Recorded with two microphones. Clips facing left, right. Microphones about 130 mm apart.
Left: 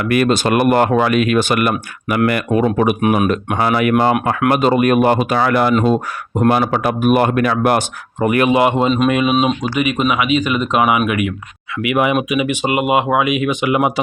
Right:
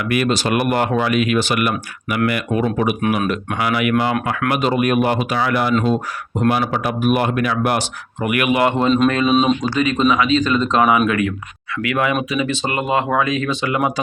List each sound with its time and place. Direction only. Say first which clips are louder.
0.0 s speech: left 4 dB; 45° left (ahead or behind)
8.2 s speech: left 4 dB; 35° left (ahead or behind)
8.6 s speech: left 1 dB; 20° left (ahead or behind)